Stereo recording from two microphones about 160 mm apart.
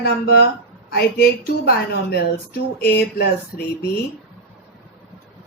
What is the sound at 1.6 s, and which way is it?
Speech, 75° left (ahead or behind).